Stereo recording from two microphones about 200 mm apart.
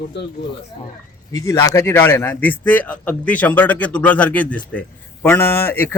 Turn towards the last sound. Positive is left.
turn(degrees=10)  # may be behind; listen again after turning